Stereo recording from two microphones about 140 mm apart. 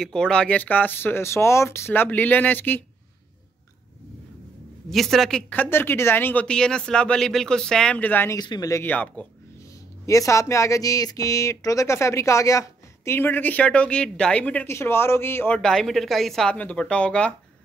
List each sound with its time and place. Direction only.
0.0 s speech: 5° left (ahead or behind)
4.8 s speech: centre (ahead or behind)
8.4 s speech: 30° left (ahead or behind); by 9.3 s 10° left (ahead or behind)
10.0 s speech: 20° left (ahead or behind)